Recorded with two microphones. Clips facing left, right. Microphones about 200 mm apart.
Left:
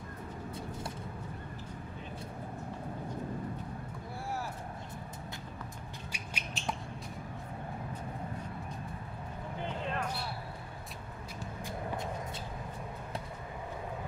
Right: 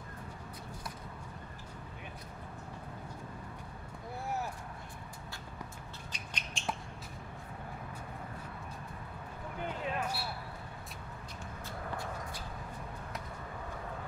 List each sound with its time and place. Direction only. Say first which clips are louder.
6.1 s a sound: left 3 dB; 10° left (ahead or behind)
9.9 s basketball bounce: even; 5° right (ahead or behind)
11.6 s vehicle: left 3 dB; 20° left (ahead or behind)